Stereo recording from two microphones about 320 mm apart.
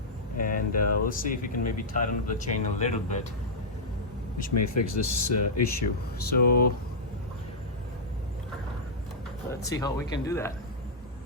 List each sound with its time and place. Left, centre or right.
0.3 s a sound: left
0.7 s speech: left
1.0 s speech: left
4.5 s speech: left
6.1 s speech: left
9.6 s speech: centre